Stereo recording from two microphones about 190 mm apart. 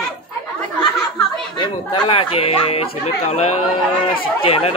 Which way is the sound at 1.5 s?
25° left (ahead or behind).